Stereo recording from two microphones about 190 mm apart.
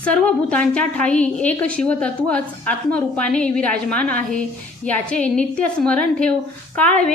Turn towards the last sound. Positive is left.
turn(degrees=5)  # may be behind; listen again after turning